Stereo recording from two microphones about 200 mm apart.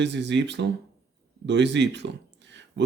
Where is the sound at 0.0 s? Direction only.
60° right (ahead or behind).